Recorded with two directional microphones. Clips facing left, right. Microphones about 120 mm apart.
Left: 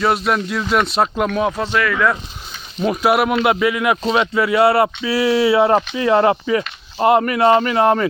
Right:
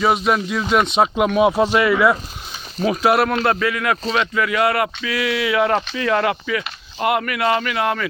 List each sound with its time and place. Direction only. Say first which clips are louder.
0.0 s speech: even; centre (ahead or behind)
2.7 s speech: left 1 dB; centre (ahead or behind); by 8.0 s 30° left (ahead or behind)